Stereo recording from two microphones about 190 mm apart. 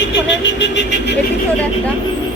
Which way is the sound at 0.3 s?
70° left (ahead or behind).